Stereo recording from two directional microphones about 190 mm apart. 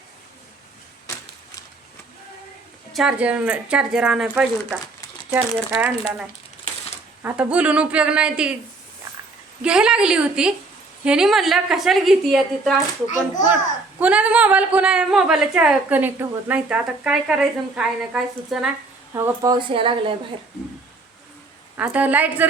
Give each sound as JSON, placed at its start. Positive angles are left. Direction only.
{"t": 2.9, "sound": "a woman's voice", "side_deg": -5}
{"t": 7.2, "sound": "speech", "side_deg": -10}
{"t": 9.6, "sound": "a woman's voice", "side_deg": -5}
{"t": 14.0, "sound": "a woman's voice", "side_deg": -5}
{"t": 21.8, "sound": "speech", "side_deg": -10}